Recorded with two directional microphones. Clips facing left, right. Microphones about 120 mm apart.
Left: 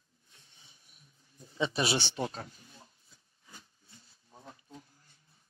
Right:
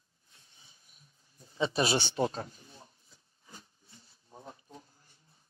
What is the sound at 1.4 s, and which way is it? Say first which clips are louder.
Speech: right 2 dB; 30° right (ahead or behind).